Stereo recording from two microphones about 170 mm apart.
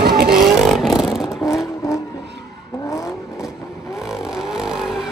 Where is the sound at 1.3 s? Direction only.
20° left (ahead or behind).